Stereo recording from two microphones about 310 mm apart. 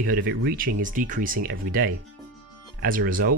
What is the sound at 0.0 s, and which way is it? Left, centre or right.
Speech, right.